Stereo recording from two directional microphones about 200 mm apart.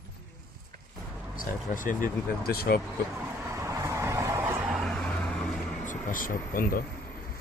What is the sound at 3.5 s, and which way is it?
Vehicle, 15° right (ahead or behind).